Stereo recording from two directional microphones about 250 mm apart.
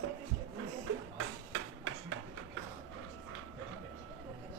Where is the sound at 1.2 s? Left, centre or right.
Right.